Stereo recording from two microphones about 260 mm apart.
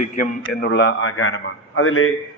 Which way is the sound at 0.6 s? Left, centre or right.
Left.